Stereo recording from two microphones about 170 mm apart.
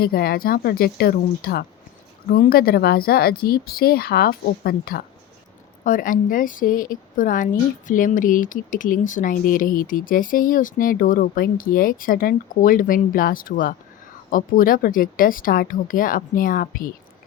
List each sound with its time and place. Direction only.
0.0 s speech: 60° left (ahead or behind)
5.8 s a woman's voice: 55° left (ahead or behind)